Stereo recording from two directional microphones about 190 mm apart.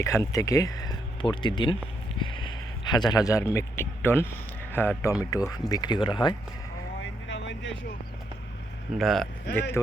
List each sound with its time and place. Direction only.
0.0 s speech: 15° left (ahead or behind)
7.0 s vehicle: 75° left (ahead or behind)
9.0 s speech: centre (ahead or behind)
9.6 s speech: 10° left (ahead or behind)